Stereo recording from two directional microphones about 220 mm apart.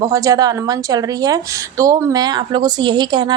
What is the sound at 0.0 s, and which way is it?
A woman's voice, 15° right (ahead or behind).